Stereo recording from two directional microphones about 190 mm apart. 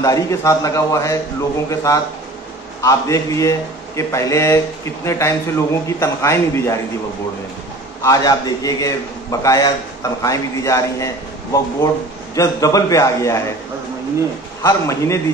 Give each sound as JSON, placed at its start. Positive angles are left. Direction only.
{"t": 0.0, "sound": "speech", "side_deg": 15}
{"t": 8.0, "sound": "speech", "side_deg": 20}
{"t": 12.4, "sound": "speech", "side_deg": 20}
{"t": 14.6, "sound": "speech", "side_deg": 15}